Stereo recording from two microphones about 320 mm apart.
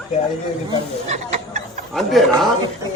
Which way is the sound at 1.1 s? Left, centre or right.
Right.